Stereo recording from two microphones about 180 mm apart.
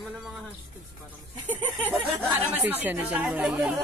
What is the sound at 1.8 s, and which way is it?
A woman's voice, centre (ahead or behind).